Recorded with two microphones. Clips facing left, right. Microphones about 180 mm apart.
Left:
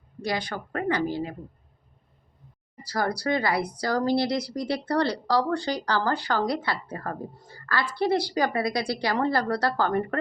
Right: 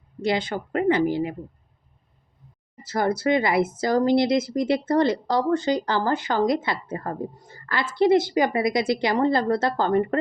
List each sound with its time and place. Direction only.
0.2 s a woman's voice: 25° right (ahead or behind)
2.8 s a woman's voice: 20° right (ahead or behind)